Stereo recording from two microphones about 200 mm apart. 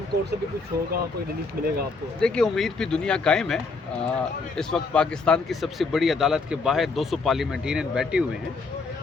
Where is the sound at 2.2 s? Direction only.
5° left (ahead or behind).